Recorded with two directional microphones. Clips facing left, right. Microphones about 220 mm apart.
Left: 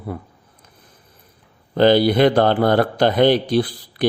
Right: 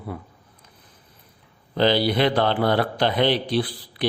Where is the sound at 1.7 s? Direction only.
50° left (ahead or behind).